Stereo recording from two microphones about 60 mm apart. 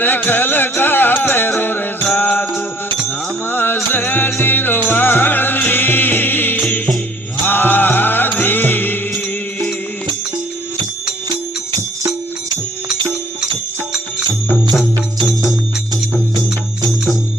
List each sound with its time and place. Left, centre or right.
0.0 s music: left